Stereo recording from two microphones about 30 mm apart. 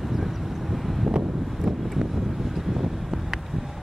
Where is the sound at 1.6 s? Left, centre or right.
Centre.